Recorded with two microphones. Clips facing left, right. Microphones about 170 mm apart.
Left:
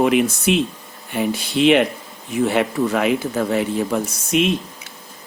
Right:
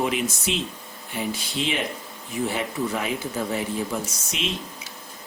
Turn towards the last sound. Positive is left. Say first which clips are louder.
# left 12 dB
turn(degrees=55)  # may be behind; listen again after turning